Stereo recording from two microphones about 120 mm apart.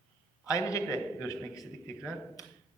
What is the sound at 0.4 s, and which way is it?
A man's voice, 30° left (ahead or behind).